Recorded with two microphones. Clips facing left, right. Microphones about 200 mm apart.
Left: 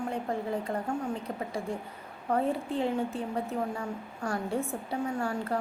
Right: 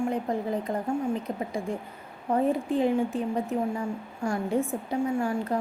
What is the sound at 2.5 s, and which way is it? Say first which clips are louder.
Speech: right 5 dB; 15° right (ahead or behind).